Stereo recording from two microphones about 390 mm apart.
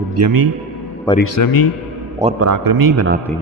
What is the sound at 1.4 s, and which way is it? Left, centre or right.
Speech, left.